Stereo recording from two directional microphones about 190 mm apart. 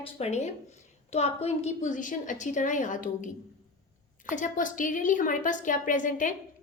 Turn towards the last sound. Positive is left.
turn(degrees=45)  # may be behind; listen again after turning